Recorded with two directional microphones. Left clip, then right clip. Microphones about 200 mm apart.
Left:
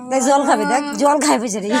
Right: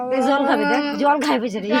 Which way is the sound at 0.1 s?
60° left (ahead or behind).